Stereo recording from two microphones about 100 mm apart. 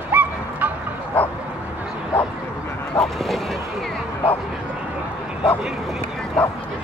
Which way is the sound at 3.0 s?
Centre (ahead or behind).